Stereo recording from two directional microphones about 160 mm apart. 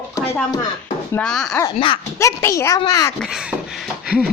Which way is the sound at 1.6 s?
30° left (ahead or behind).